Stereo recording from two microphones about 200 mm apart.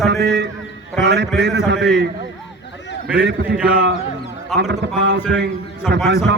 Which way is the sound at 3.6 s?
55° right (ahead or behind).